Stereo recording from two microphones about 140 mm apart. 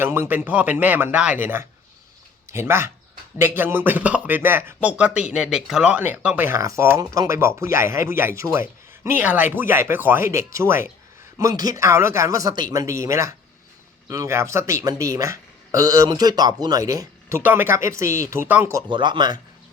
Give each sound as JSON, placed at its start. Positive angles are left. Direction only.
{"t": 0.0, "sound": "a man's voice", "side_deg": -15}
{"t": 18.9, "sound": "speech", "side_deg": -35}